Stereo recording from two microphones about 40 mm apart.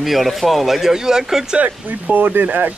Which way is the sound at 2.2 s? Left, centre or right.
Right.